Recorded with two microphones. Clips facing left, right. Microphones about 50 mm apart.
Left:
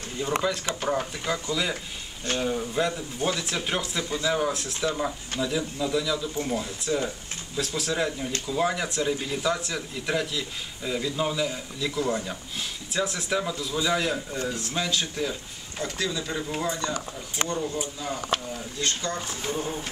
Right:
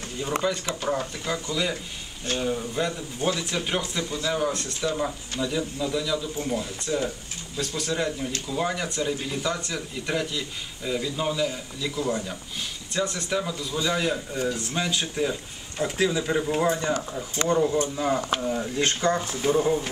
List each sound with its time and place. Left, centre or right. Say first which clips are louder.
0.4 s speech: right 1 dB; centre
17.9 s speech: right 8 dB; right
18.5 s speech: right 5 dB; right